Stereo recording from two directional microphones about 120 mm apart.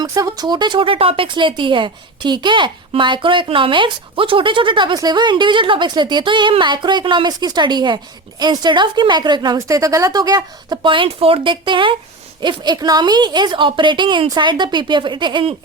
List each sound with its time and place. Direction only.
0.0 s a woman's voice: 30° right (ahead or behind)